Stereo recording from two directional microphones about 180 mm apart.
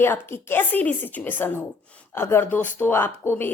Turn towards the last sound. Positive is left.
turn(degrees=10)  # may be behind; listen again after turning